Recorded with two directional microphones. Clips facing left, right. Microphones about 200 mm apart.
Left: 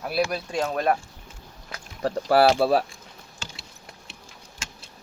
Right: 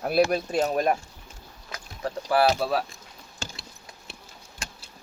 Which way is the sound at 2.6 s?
60° left (ahead or behind).